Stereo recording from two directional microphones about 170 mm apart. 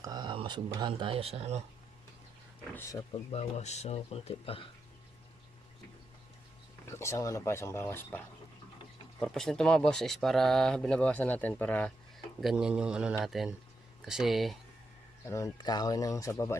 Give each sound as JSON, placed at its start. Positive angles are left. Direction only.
{"t": 0.0, "sound": "speech", "side_deg": -25}
{"t": 2.7, "sound": "speech", "side_deg": 15}
{"t": 3.1, "sound": "speech", "side_deg": 40}
{"t": 6.8, "sound": "speech", "side_deg": 15}
{"t": 9.2, "sound": "speech", "side_deg": 0}
{"t": 12.4, "sound": "speech", "side_deg": -5}
{"t": 15.3, "sound": "speech", "side_deg": 15}